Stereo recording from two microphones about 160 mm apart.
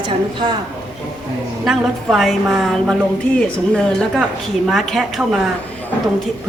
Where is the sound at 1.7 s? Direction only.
Centre (ahead or behind).